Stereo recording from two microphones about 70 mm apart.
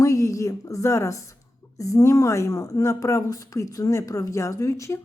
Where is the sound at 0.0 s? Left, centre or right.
Left.